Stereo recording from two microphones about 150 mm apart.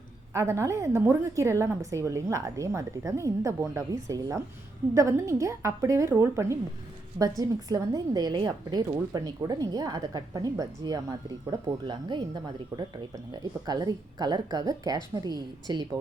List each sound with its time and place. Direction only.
0.3 s a woman's voice: 20° right (ahead or behind)